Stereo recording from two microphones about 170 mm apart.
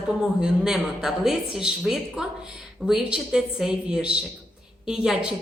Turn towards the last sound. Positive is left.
turn(degrees=-5)  # may be behind; listen again after turning